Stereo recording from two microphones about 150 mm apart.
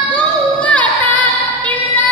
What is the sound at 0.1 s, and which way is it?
Female singing, 10° left (ahead or behind).